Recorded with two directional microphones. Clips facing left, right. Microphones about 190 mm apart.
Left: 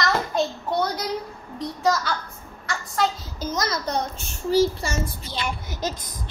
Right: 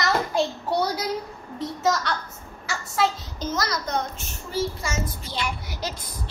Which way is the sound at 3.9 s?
35° left (ahead or behind).